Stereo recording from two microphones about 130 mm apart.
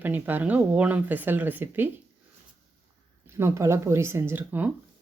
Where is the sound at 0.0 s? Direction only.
15° right (ahead or behind).